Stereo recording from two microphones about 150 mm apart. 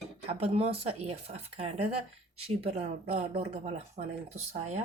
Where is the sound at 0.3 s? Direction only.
40° right (ahead or behind).